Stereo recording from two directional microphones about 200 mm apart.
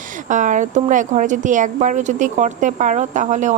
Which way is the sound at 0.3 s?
40° right (ahead or behind).